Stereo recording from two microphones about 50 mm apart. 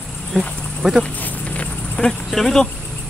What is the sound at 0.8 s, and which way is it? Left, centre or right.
Speech, centre.